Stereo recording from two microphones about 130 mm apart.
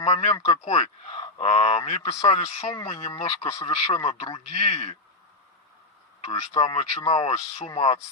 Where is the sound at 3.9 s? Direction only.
45° left (ahead or behind).